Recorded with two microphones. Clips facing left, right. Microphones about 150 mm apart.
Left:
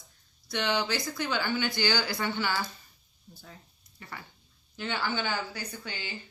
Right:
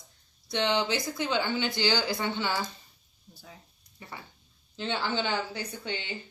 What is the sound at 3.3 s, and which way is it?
Speech, 10° right (ahead or behind).